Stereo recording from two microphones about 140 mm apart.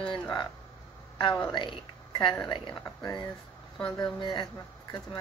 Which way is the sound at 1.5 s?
35° left (ahead or behind).